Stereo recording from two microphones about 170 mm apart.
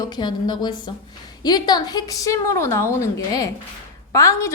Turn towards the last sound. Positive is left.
turn(degrees=15)  # may be behind; listen again after turning